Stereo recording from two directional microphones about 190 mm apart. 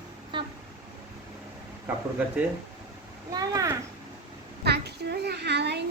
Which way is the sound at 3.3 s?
20° right (ahead or behind).